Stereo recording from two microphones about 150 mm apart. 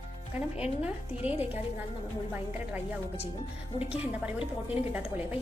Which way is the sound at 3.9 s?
5° right (ahead or behind).